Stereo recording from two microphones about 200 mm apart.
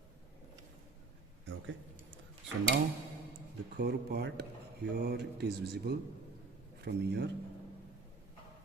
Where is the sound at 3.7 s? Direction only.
55° right (ahead or behind).